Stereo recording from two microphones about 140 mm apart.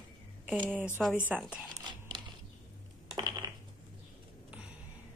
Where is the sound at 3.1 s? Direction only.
30° right (ahead or behind).